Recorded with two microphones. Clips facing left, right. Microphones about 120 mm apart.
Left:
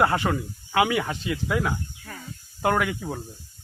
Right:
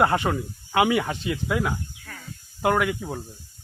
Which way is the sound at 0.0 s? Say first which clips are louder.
Right 1 dB; 20° right (ahead or behind).